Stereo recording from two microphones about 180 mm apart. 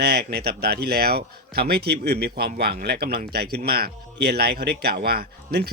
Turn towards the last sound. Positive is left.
turn(degrees=-60)  # may be behind; listen again after turning